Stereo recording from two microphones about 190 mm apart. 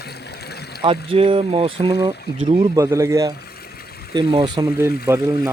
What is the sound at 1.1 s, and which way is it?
Speech, 30° right (ahead or behind).